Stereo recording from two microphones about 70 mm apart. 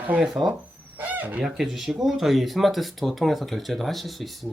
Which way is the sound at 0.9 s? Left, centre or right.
Right.